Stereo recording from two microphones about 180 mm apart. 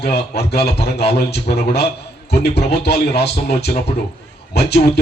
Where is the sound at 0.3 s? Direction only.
65° left (ahead or behind).